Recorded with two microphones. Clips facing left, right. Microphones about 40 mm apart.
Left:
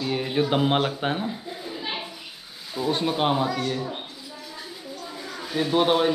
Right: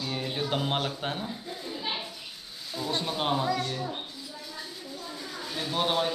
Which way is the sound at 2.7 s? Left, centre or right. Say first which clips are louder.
Left 6 dB; centre.